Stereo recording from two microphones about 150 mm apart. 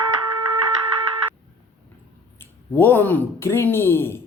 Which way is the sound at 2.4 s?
15° left (ahead or behind).